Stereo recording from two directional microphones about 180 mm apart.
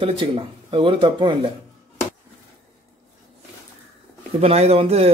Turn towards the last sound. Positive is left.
turn(degrees=-35)  # may be behind; listen again after turning